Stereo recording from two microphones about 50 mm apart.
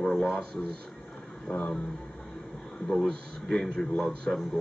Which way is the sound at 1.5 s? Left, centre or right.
Centre.